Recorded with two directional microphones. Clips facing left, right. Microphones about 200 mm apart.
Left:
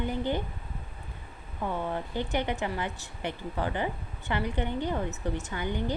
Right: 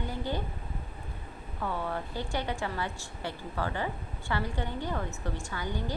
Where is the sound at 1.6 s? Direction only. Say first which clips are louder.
Left 2 dB; 20° left (ahead or behind).